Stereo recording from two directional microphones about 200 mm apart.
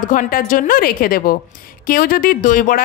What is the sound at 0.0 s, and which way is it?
A woman's voice, 40° left (ahead or behind).